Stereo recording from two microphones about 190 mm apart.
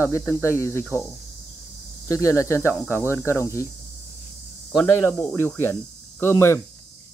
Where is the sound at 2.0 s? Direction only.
15° left (ahead or behind).